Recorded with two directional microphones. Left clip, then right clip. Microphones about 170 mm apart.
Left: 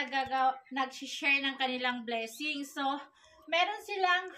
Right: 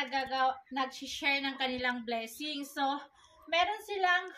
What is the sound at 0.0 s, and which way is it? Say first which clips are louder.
A woman's voice: left 1 dB; 25° right (ahead or behind).